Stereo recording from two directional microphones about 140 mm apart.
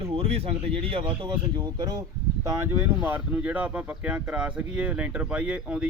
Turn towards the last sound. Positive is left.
turn(degrees=-5)  # may be behind; listen again after turning